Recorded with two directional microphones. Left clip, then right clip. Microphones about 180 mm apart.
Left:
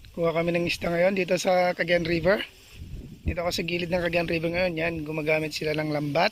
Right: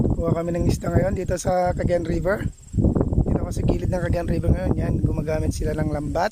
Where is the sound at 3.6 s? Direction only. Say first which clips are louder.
Right 2 dB; 60° right (ahead or behind).